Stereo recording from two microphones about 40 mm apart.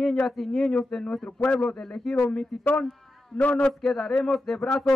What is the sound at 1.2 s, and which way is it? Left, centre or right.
Speech, left.